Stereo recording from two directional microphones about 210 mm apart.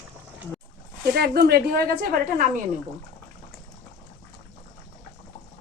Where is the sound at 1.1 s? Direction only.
45° right (ahead or behind).